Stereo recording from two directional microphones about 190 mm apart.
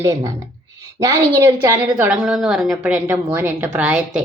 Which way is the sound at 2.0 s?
5° right (ahead or behind).